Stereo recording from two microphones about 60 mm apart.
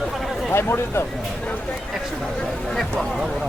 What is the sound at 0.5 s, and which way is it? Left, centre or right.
Speech, left.